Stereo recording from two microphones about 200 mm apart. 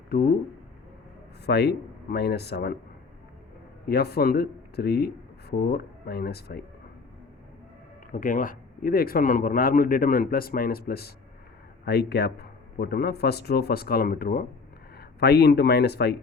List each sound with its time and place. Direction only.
0.1 s speech: 50° left (ahead or behind)
1.5 s speech: 55° left (ahead or behind)
3.8 s a man's voice: 50° left (ahead or behind)
8.1 s speech: 45° left (ahead or behind)